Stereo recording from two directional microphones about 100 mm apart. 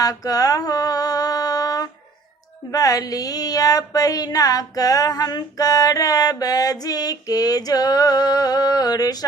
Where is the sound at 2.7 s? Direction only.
40° left (ahead or behind).